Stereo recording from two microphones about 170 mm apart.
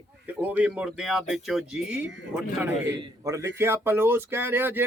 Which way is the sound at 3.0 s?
20° right (ahead or behind).